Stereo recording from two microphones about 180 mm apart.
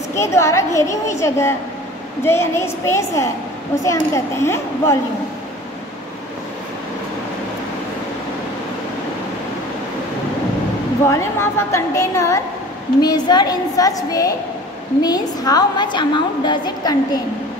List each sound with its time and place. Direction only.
0.1 s a woman's voice: 15° left (ahead or behind)
11.1 s a woman's voice: 15° left (ahead or behind)